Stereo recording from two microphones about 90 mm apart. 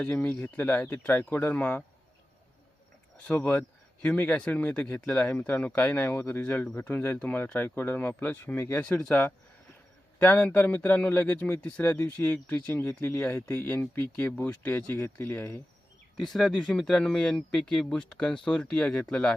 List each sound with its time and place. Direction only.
0.0 s speech: 20° left (ahead or behind)
3.2 s speech: 15° left (ahead or behind)
8.8 s speech: 10° left (ahead or behind)
16.1 s speech: 5° left (ahead or behind)